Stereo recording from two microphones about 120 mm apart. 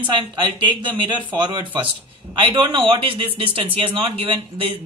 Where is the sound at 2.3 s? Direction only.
40° right (ahead or behind).